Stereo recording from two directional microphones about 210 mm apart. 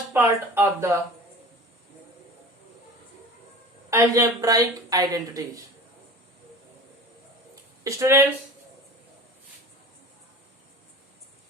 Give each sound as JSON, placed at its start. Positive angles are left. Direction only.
{"t": 0.1, "sound": "speech", "side_deg": -10}
{"t": 3.8, "sound": "speech", "side_deg": -15}
{"t": 7.9, "sound": "speech", "side_deg": -10}